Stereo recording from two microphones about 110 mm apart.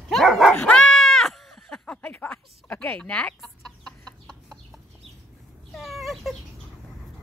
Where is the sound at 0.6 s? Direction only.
10° left (ahead or behind).